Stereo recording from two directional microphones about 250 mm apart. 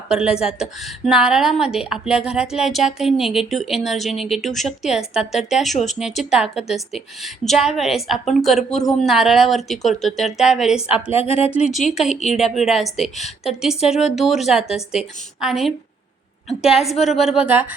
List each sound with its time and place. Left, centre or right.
0.1 s a woman's voice: centre
10.8 s speech: left
12.5 s a woman's voice: centre
13.2 s speech: left
13.9 s a woman's voice: centre